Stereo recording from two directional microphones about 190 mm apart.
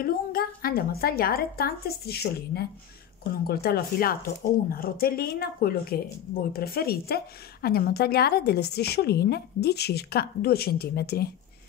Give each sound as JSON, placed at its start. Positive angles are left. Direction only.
{"t": 0.0, "sound": "a woman's voice", "side_deg": 50}